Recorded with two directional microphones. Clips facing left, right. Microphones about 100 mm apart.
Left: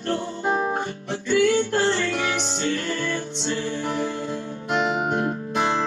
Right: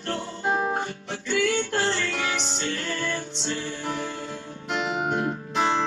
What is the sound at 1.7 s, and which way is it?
Music, 30° left (ahead or behind).